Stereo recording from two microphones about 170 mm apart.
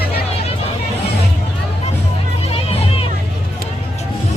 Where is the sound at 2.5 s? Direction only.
35° left (ahead or behind).